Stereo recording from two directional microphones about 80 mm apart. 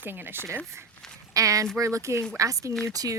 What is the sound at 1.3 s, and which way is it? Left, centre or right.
Speech, right.